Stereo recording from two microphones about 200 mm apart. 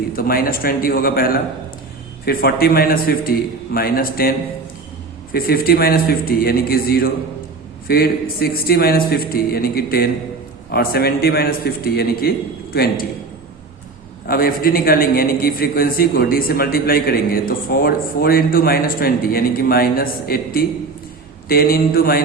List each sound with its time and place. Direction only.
0.2 s a man's voice: 45° left (ahead or behind)
14.3 s a man's voice: 45° left (ahead or behind)